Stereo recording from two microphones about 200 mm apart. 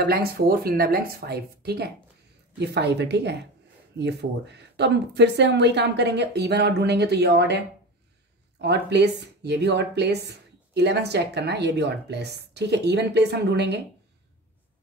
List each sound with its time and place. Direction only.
0.0 s speech: 50° right (ahead or behind)